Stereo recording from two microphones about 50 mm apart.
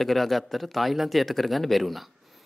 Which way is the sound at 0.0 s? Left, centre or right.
Centre.